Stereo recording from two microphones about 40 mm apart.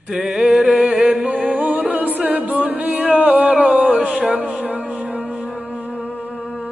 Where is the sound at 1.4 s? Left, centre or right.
Right.